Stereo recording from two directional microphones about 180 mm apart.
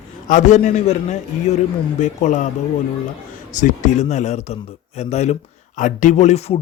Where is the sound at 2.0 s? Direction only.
45° left (ahead or behind).